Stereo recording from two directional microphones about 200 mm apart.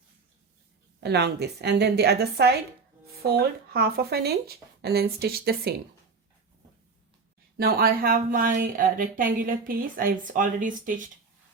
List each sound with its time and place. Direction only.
1.0 s a woman's voice: 55° right (ahead or behind)
7.6 s a woman's voice: 45° right (ahead or behind)